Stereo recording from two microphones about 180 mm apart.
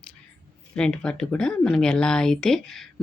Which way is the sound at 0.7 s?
5° left (ahead or behind).